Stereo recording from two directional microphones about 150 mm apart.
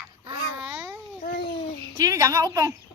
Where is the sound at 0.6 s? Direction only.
10° right (ahead or behind).